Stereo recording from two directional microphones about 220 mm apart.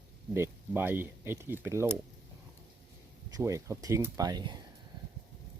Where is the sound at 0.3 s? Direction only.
10° right (ahead or behind).